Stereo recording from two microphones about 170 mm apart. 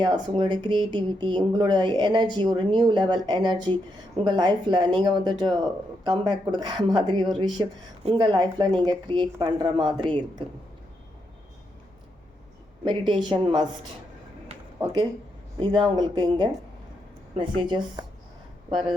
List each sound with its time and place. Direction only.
0.0 s speech: 25° right (ahead or behind)
12.8 s speech: 25° right (ahead or behind)
15.6 s speech: 30° right (ahead or behind)